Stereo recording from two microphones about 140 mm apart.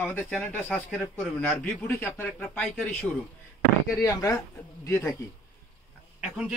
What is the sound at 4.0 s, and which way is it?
Speech, 20° left (ahead or behind).